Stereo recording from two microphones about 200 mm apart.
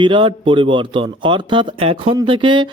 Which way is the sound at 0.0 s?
25° right (ahead or behind).